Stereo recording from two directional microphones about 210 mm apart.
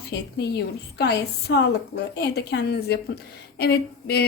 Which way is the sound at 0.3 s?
50° left (ahead or behind).